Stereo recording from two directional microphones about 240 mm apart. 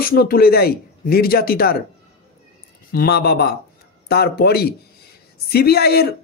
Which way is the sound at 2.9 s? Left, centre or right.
Left.